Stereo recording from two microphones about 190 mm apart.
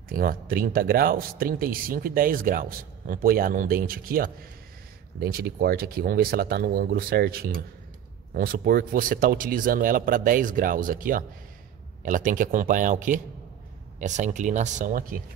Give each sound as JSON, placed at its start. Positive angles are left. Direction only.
{"t": 0.1, "sound": "speech", "side_deg": -50}